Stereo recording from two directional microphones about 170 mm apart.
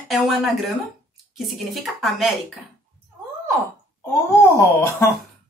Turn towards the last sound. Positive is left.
turn(degrees=15)  # may be behind; listen again after turning